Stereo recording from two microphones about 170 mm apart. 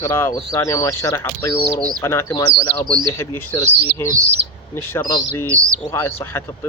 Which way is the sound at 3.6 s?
40° right (ahead or behind).